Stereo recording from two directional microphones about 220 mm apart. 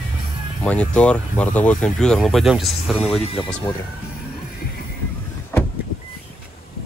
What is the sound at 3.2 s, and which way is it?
Speech, 25° left (ahead or behind).